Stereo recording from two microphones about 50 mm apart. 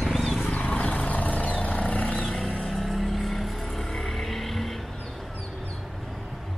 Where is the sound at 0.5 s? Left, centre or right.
Left.